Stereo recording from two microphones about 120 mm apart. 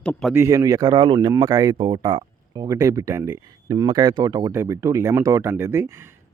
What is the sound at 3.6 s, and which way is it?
Speech, 35° right (ahead or behind).